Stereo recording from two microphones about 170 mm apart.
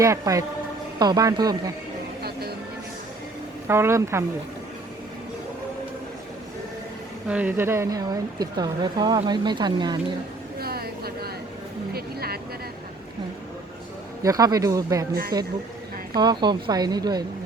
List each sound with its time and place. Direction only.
0.0 s speech: 20° right (ahead or behind)
3.7 s speech: 15° right (ahead or behind)
7.3 s speech: 10° right (ahead or behind)
10.6 s a sound: 65° right (ahead or behind)
14.2 s speech: 20° right (ahead or behind)
15.1 s speech: 65° right (ahead or behind)
16.1 s speech: 25° right (ahead or behind)